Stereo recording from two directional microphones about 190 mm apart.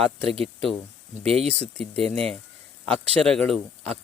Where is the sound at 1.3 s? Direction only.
35° right (ahead or behind).